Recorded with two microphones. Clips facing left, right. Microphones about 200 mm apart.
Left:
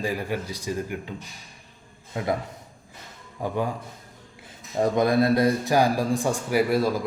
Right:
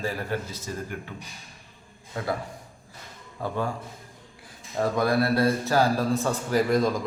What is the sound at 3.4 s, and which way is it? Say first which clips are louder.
Speech: left 2 dB; 15° left (ahead or behind).